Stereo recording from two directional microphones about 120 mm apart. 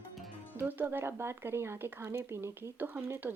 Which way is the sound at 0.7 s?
15° right (ahead or behind).